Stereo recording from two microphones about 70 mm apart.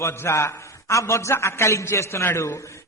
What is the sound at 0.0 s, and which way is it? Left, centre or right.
A man's voice, left.